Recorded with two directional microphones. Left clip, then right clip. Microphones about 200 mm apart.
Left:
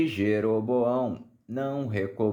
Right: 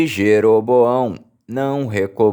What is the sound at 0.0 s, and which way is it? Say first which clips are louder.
Speech: right 12 dB; 45° right (ahead or behind).